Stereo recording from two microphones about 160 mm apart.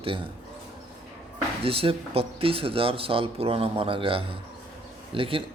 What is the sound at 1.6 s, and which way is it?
Speech, 35° right (ahead or behind).